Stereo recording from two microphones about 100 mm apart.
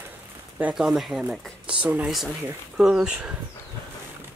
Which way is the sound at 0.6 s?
10° right (ahead or behind).